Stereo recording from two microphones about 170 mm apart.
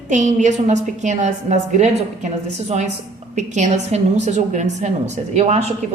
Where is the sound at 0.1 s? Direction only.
45° right (ahead or behind).